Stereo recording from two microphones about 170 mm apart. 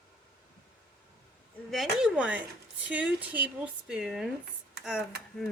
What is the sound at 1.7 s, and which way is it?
Speech, centre (ahead or behind).